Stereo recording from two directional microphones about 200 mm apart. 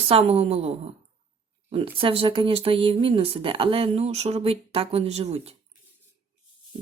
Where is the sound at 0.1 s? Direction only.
30° right (ahead or behind).